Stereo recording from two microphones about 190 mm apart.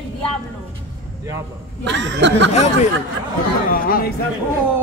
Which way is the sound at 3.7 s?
50° left (ahead or behind).